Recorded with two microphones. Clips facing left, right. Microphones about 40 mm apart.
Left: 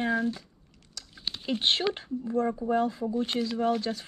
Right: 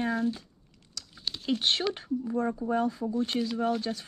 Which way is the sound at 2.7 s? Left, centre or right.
Left.